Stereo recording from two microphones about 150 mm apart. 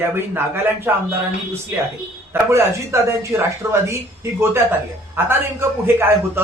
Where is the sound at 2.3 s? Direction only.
20° right (ahead or behind).